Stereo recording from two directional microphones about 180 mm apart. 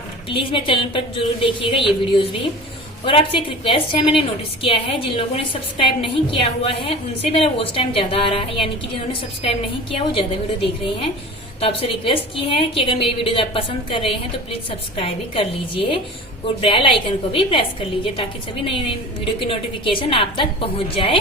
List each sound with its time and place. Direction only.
0.3 s a woman's voice: 30° left (ahead or behind)
11.6 s a woman's voice: 30° left (ahead or behind)